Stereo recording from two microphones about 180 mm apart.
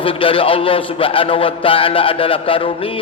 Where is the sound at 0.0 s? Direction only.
30° left (ahead or behind).